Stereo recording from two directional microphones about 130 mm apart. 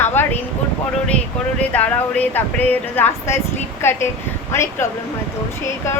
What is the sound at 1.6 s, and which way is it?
A woman's voice, 10° left (ahead or behind).